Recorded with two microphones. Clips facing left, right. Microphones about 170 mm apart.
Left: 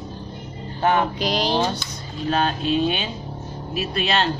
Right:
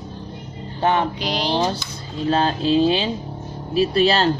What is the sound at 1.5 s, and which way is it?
Speech, 35° right (ahead or behind).